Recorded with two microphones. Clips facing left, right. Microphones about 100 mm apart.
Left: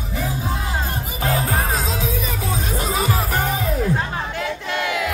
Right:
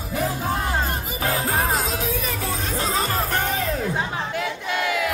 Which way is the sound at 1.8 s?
20° left (ahead or behind).